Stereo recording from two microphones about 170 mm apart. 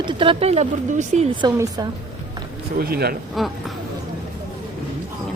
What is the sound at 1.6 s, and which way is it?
Speech, 25° right (ahead or behind).